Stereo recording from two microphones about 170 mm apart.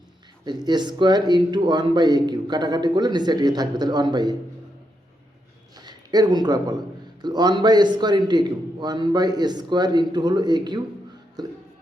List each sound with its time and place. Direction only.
0.4 s a man's voice: 25° right (ahead or behind)
5.7 s a sound: 25° right (ahead or behind)
7.2 s a man's voice: 25° right (ahead or behind)
11.4 s music: 25° right (ahead or behind)